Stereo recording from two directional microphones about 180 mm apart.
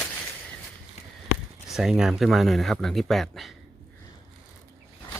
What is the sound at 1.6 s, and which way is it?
Speech, centre (ahead or behind).